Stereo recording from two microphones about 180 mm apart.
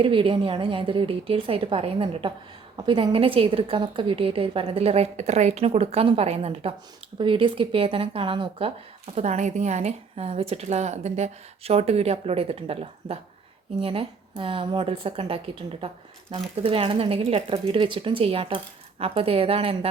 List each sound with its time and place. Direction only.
0.0 s a woman's voice: 30° right (ahead or behind)